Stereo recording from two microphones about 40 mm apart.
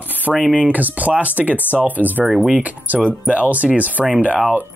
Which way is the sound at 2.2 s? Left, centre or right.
Centre.